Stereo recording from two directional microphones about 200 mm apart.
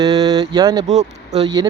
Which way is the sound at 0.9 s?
35° right (ahead or behind).